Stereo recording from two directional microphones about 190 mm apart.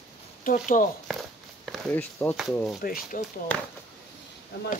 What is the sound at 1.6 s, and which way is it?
Speech, 5° left (ahead or behind).